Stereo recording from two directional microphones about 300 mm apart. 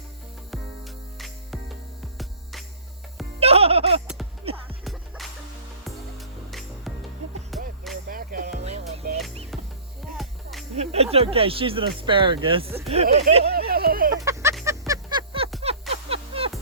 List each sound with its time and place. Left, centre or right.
2.1 s music: centre
3.4 s music: centre
4.0 s music: centre
4.5 s music: centre
4.8 s music: centre
8.0 s music: right
10.2 s music: centre
10.8 s speech: right
13.5 s a sound: right
14.3 s a sound: centre
14.5 s music: centre
15.6 s a sound: centre